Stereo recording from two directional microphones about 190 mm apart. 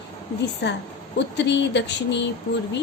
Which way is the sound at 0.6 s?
65° left (ahead or behind).